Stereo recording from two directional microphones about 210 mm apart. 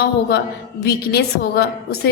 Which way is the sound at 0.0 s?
50° left (ahead or behind).